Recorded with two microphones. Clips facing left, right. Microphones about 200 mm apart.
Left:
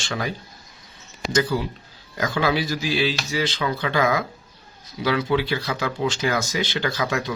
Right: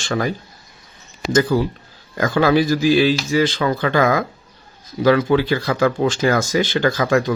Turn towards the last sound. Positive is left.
turn(degrees=-50)  # may be behind; listen again after turning